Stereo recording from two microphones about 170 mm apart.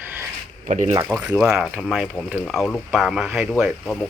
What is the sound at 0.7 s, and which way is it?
Speech, 45° right (ahead or behind).